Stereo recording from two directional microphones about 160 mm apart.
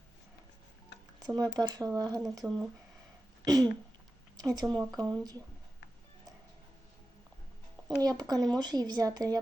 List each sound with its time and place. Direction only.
1.2 s speech: 25° right (ahead or behind)
3.4 s speech: 25° right (ahead or behind)
7.9 s speech: 25° right (ahead or behind)